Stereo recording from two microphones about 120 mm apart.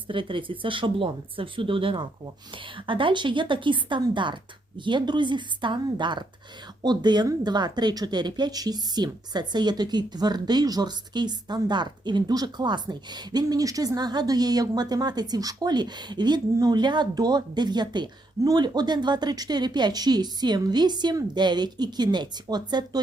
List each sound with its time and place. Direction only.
0.1 s speech: 45° right (ahead or behind)